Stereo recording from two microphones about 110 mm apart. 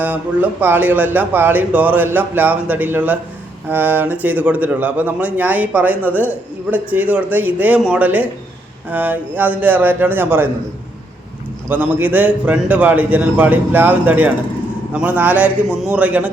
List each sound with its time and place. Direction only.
0.0 s speech: 15° right (ahead or behind)
11.7 s speech: 15° right (ahead or behind)